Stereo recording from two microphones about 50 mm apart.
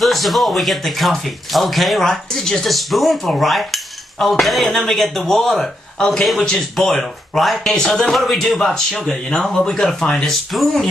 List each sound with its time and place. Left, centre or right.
0.0 s cutlery: centre
5.9 s a man's voice: centre